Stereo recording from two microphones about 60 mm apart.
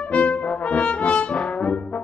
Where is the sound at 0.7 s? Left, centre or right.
Centre.